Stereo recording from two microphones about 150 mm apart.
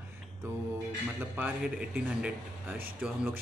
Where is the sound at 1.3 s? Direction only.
10° right (ahead or behind).